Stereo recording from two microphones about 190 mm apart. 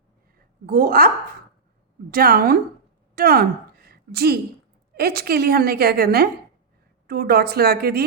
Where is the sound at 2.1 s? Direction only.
50° right (ahead or behind).